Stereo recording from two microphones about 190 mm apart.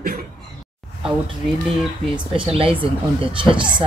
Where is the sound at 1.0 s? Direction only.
Centre (ahead or behind).